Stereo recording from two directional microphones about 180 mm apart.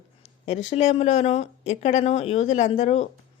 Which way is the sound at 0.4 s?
35° left (ahead or behind).